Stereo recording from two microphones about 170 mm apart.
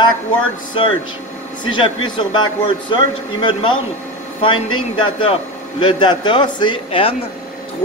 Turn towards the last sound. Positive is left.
turn(degrees=30)  # may be behind; listen again after turning